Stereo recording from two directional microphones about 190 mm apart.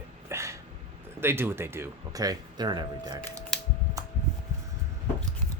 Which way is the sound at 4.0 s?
20° right (ahead or behind).